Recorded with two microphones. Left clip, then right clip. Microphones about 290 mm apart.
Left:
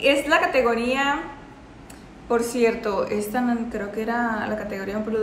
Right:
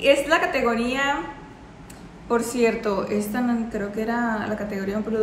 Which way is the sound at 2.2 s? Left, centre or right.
Centre.